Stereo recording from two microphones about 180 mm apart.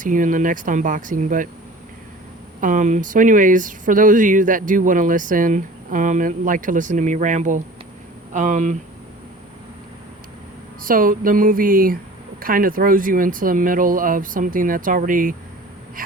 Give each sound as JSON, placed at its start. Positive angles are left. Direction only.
{"t": 0.0, "sound": "speech", "side_deg": -45}
{"t": 2.6, "sound": "speech", "side_deg": -45}
{"t": 10.8, "sound": "speech", "side_deg": -50}